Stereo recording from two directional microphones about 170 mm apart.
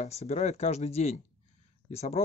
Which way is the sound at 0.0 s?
40° left (ahead or behind).